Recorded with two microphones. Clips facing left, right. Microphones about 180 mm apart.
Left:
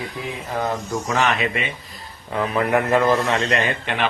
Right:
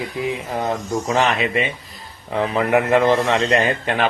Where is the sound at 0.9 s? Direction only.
25° right (ahead or behind).